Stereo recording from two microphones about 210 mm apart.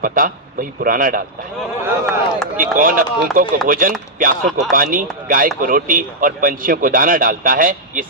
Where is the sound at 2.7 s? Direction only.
40° right (ahead or behind).